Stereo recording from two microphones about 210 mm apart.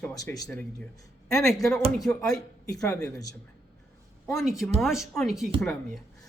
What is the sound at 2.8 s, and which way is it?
Speech, 10° left (ahead or behind).